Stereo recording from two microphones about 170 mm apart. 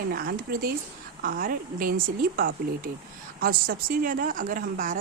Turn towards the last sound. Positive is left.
turn(degrees=-55)  # may be behind; listen again after turning